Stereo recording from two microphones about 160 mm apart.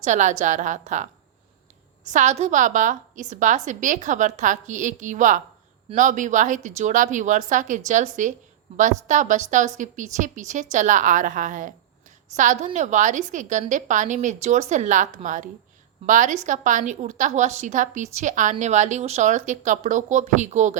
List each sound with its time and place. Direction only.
0.0 s a woman's voice: 50° right (ahead or behind)
2.0 s a woman's voice: 50° right (ahead or behind)